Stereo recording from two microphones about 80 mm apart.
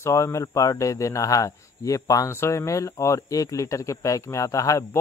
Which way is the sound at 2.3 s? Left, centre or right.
Left.